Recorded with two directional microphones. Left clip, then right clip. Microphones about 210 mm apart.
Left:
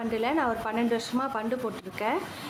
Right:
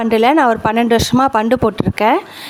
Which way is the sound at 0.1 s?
50° right (ahead or behind).